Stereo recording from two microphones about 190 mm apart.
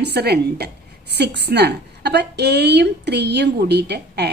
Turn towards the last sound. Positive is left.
turn(degrees=-60)  # may be behind; listen again after turning